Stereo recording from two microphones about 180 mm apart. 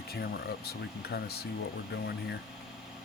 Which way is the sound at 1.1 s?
65° left (ahead or behind).